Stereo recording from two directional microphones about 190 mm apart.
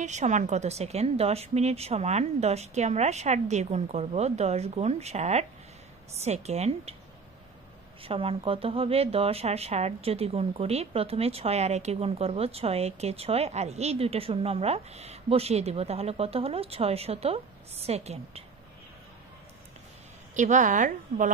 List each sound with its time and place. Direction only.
0.0 s speech: 40° right (ahead or behind)
8.0 s speech: 30° right (ahead or behind)
20.3 s speech: 40° right (ahead or behind)